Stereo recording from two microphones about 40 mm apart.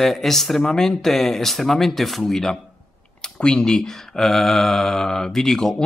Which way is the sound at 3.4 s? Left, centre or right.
Left.